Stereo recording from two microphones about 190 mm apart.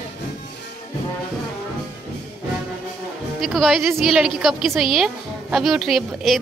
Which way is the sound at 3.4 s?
Centre (ahead or behind).